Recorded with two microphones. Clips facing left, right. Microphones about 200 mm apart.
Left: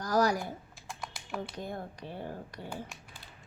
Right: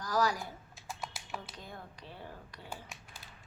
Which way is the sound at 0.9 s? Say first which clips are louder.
Left 1 dB; 5° right (ahead or behind).